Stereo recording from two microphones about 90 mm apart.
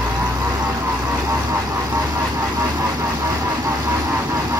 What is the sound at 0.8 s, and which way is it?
Vehicle, 35° right (ahead or behind).